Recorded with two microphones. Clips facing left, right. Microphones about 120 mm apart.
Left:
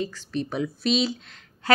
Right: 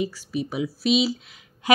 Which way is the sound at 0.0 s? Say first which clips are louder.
Right 2 dB; 10° right (ahead or behind).